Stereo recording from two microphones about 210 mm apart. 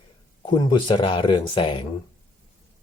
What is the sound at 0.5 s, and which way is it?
Speech, 20° left (ahead or behind).